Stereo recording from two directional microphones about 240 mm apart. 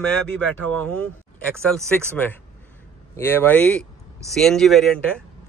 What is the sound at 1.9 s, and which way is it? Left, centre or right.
A man's voice, centre.